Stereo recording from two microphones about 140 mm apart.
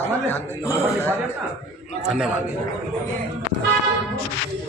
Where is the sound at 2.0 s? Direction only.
5° right (ahead or behind).